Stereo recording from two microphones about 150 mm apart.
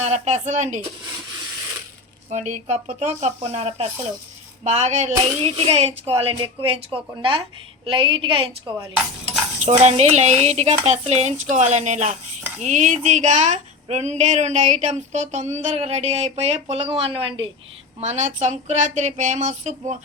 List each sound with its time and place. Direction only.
0.0 s a woman's voice: 50° right (ahead or behind)
2.3 s a woman's voice: 50° right (ahead or behind); by 8.7 s 35° right (ahead or behind)
9.6 s a woman's voice: 50° right (ahead or behind)
18.0 s a woman's voice: 50° right (ahead or behind)